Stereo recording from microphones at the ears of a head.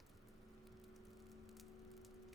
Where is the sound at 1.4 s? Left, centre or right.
Left.